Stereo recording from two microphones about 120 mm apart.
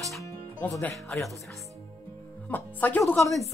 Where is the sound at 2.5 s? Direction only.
15° left (ahead or behind).